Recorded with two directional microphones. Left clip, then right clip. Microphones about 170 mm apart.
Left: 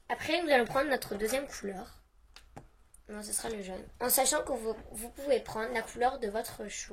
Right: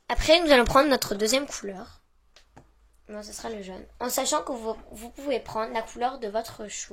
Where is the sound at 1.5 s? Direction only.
25° right (ahead or behind).